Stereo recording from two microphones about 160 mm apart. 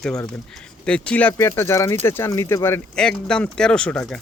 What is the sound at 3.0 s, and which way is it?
Speech, 5° left (ahead or behind).